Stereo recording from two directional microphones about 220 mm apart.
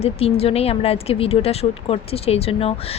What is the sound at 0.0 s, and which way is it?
Speech, 25° left (ahead or behind).